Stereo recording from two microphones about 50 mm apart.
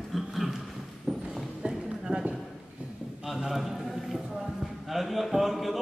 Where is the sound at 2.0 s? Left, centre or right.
Centre.